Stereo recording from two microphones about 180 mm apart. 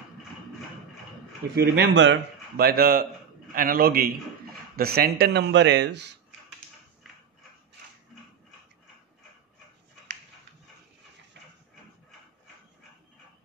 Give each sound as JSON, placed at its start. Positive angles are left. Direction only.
{"t": 1.5, "sound": "a man's voice", "side_deg": -70}